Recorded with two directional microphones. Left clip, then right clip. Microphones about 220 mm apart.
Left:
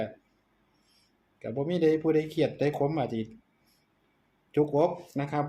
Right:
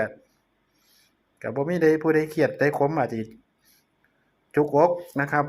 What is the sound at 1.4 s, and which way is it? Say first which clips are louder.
Speech: right 6 dB; 5° right (ahead or behind).